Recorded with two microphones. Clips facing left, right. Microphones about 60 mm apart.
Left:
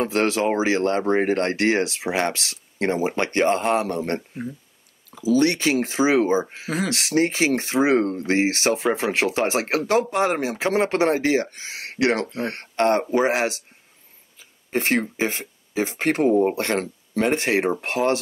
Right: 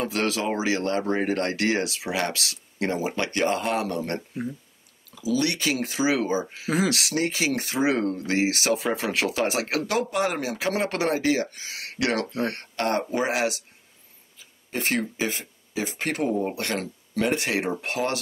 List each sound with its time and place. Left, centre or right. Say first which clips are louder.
0.0 s speech: left 5 dB; left
13.0 s speech: left 6 dB; centre
13.3 s speech: left 3 dB; left
14.7 s speech: left 5 dB; left